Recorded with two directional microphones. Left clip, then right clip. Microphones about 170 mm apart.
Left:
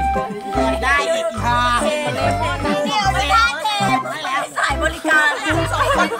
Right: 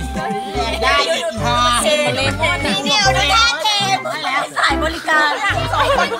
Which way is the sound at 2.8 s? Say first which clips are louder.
Right 4 dB; 35° right (ahead or behind).